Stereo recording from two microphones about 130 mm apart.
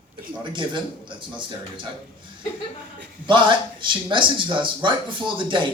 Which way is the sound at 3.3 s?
40° right (ahead or behind).